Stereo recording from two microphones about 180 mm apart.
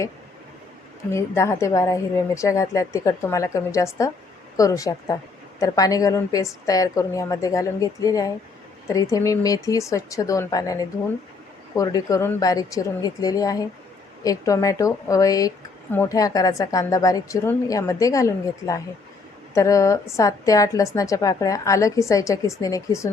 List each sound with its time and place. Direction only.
1.1 s a woman's voice: 15° left (ahead or behind)